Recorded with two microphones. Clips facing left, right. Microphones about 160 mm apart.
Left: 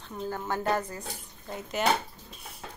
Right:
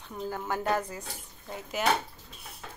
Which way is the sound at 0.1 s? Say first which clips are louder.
Left 1 dB; 5° right (ahead or behind).